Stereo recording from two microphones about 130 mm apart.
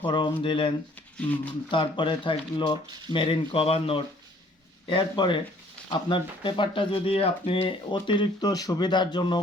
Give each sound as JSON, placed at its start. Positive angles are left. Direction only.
{"t": 0.0, "sound": "speech", "side_deg": 40}
{"t": 1.7, "sound": "speech", "side_deg": 40}